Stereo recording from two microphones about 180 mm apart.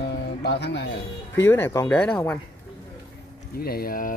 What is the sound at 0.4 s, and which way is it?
Speech, 65° left (ahead or behind).